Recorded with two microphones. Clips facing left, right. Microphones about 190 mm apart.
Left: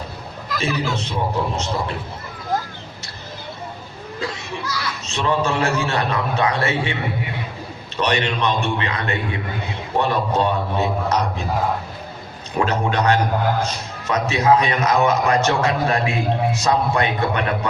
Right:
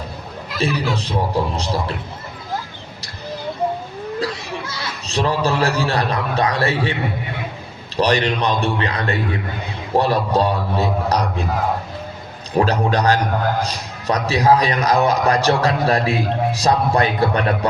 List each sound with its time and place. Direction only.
0.6 s a man's voice: 35° right (ahead or behind)
4.2 s a man's voice: 25° right (ahead or behind)
7.9 s a man's voice: 35° right (ahead or behind)
12.5 s a man's voice: 35° right (ahead or behind)